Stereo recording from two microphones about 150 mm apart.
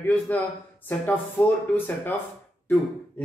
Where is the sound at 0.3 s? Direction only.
10° left (ahead or behind).